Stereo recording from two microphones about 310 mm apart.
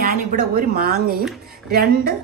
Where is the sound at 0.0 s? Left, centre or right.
Right.